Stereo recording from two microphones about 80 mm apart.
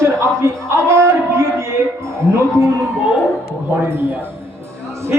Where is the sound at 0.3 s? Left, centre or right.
Right.